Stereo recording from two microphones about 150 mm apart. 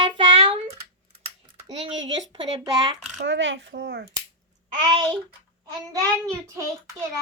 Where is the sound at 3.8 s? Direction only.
90° right.